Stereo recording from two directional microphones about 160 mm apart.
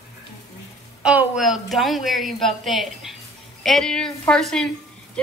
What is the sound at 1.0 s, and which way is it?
A woman's voice, 5° right (ahead or behind).